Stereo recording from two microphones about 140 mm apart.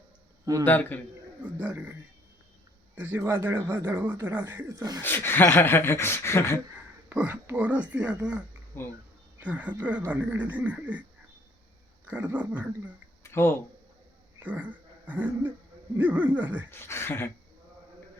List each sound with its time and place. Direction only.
0.6 s speech: 15° left (ahead or behind)
1.5 s speech: 10° right (ahead or behind)
4.7 s speech: 25° right (ahead or behind)
5.0 s speech: 15° left (ahead or behind)
6.7 s speech: 10° right (ahead or behind)
8.7 s speech: 15° left (ahead or behind)
9.4 s speech: 10° right (ahead or behind)
12.0 s speech: 10° right (ahead or behind)
13.2 s speech: 20° left (ahead or behind)
14.3 s speech: 10° right (ahead or behind)
16.7 s speech: 15° left (ahead or behind)